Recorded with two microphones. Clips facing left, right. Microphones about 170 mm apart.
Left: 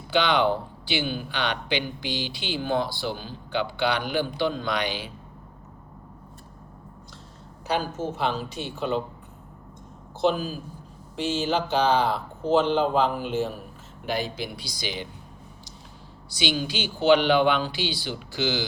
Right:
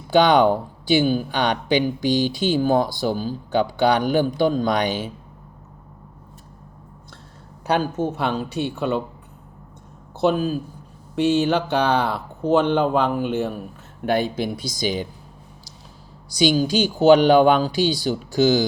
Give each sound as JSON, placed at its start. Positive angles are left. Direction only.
{"t": 0.1, "sound": "speech", "side_deg": -45}
{"t": 7.7, "sound": "speech", "side_deg": -60}
{"t": 11.2, "sound": "speech", "side_deg": -65}
{"t": 16.3, "sound": "speech", "side_deg": -40}